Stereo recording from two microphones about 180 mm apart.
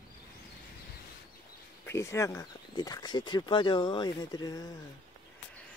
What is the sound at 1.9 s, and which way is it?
Speech, 15° left (ahead or behind).